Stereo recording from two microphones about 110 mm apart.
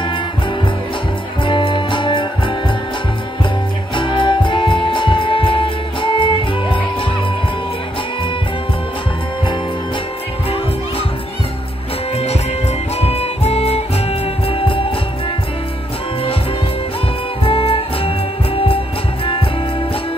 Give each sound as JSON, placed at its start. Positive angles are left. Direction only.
{"t": 1.4, "sound": "music", "side_deg": 50}
{"t": 3.9, "sound": "music", "side_deg": 45}
{"t": 13.0, "sound": "music", "side_deg": 65}
{"t": 17.4, "sound": "music", "side_deg": 55}